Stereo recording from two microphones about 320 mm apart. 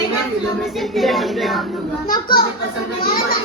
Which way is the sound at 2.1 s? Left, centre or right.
Left.